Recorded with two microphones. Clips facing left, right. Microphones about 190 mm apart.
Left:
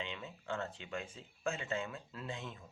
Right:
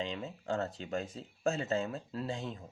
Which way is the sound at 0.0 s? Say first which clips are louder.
Right 7 dB; 35° right (ahead or behind).